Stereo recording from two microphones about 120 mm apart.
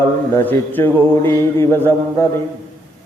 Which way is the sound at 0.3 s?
20° left (ahead or behind).